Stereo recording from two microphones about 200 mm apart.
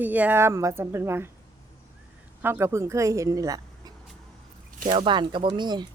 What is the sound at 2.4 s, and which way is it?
A woman's voice, 10° right (ahead or behind).